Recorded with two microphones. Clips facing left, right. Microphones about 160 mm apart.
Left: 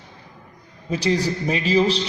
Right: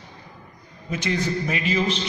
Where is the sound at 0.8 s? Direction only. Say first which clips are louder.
Left 4 dB; 35° left (ahead or behind).